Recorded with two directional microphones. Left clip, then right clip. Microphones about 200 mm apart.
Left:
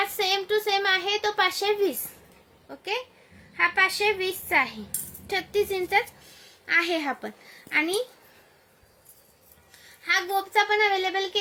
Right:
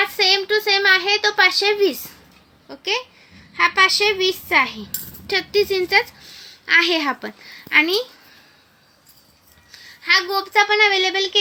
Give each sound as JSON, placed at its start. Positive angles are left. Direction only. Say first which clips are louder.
{"t": 0.2, "sound": "a woman's voice", "louder": "right 8 dB", "side_deg": 20}
{"t": 10.0, "sound": "a woman's voice", "louder": "right 7 dB", "side_deg": 15}